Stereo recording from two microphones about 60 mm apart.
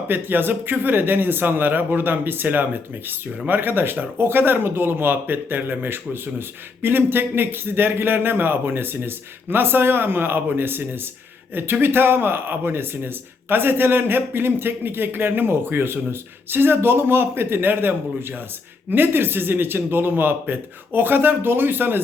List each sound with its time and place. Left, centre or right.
0.1 s speech: right